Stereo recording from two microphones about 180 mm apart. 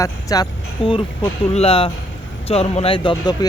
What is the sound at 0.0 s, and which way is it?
Speech, 20° left (ahead or behind).